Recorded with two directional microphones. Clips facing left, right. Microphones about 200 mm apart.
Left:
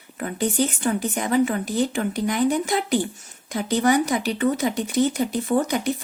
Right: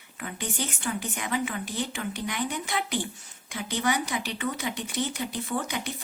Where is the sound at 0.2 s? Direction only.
40° left (ahead or behind).